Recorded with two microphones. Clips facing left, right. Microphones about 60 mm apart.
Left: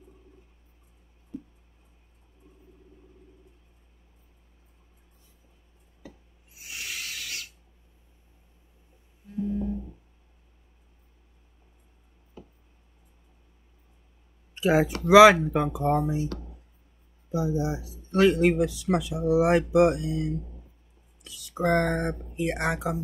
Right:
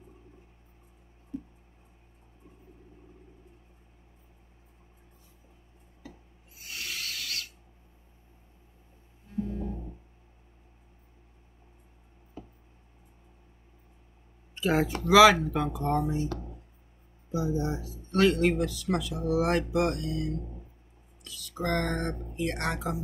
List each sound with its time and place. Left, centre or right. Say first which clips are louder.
6.6 s rub: left 1 dB; centre
9.4 s music: left 4 dB; centre
14.5 s speech: left 4 dB; centre
15.0 s speech: left 4 dB; centre
15.9 s speech: left 2 dB; centre
16.3 s music: right 1 dB; right
17.3 s speech: left 2 dB; centre